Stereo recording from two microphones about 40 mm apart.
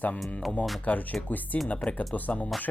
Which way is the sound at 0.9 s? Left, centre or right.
Left.